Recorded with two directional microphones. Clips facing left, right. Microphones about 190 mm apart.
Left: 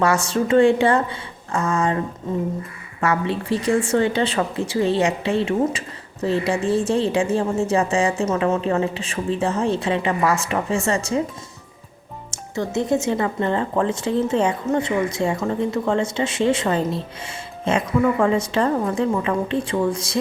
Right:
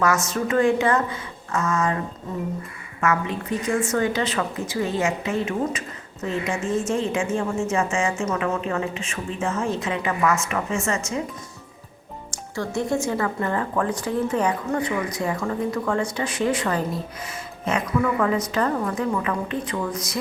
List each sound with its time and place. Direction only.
0.0 s speech: 30° left (ahead or behind)
3.0 s speech: 35° left (ahead or behind)
12.3 s speech: 20° left (ahead or behind)